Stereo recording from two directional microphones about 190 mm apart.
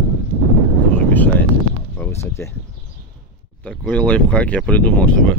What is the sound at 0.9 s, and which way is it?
Vehicle, 10° left (ahead or behind).